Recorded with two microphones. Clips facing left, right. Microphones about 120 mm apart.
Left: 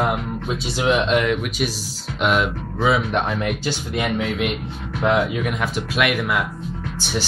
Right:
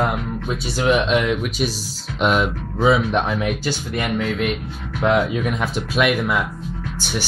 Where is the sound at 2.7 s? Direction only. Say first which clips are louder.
Right 3 dB; 10° right (ahead or behind); by 5.5 s 10° left (ahead or behind).